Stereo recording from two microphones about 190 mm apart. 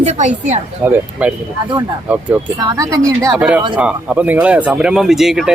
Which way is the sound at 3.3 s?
5° right (ahead or behind).